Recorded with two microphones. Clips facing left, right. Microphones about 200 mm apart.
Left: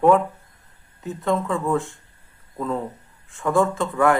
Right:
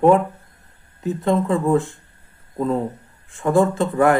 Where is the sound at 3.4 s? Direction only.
30° right (ahead or behind).